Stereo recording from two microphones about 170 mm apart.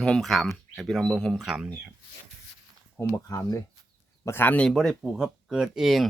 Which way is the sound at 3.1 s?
20° left (ahead or behind).